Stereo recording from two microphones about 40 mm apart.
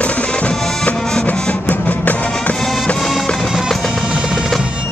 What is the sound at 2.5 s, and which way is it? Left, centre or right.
Music, centre.